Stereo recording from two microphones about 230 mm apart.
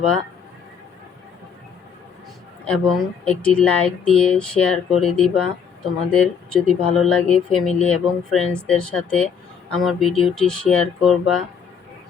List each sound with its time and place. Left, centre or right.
2.6 s speech: centre